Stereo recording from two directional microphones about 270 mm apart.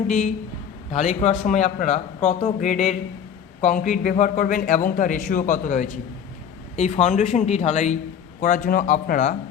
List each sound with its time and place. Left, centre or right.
0.9 s a man's voice: left